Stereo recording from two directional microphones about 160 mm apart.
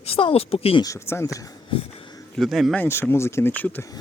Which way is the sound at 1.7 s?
35° left (ahead or behind).